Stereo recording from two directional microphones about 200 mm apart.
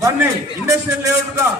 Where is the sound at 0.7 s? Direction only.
15° right (ahead or behind).